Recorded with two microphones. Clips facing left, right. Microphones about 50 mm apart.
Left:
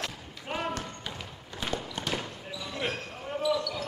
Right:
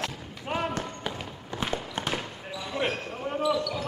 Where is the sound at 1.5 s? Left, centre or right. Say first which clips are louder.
Right 3 dB; right.